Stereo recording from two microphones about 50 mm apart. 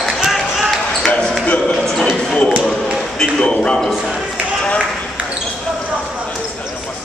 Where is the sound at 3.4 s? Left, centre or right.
Centre.